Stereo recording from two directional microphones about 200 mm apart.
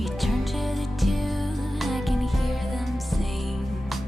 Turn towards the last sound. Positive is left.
turn(degrees=0)  # may be behind; listen again after turning